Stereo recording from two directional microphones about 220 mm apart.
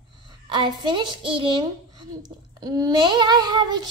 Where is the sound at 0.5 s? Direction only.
20° right (ahead or behind).